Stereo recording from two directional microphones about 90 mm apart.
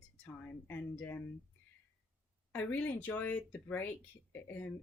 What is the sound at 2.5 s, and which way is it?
Speech, 20° left (ahead or behind).